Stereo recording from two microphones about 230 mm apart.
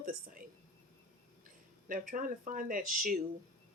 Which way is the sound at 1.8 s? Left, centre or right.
Right.